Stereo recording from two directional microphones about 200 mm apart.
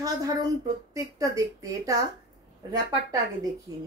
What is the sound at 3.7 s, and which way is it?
Speech, 15° right (ahead or behind).